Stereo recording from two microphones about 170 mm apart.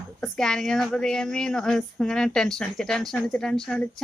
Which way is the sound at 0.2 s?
5° left (ahead or behind).